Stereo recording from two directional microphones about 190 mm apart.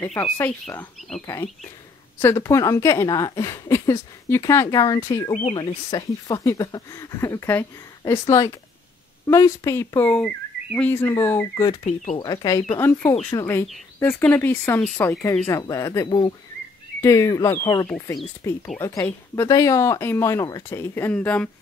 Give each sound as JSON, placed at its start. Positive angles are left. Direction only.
{"t": 0.0, "sound": "speech", "side_deg": 10}
{"t": 5.4, "sound": "speech", "side_deg": 30}
{"t": 11.8, "sound": "speech", "side_deg": 35}
{"t": 12.2, "sound": "speech", "side_deg": 20}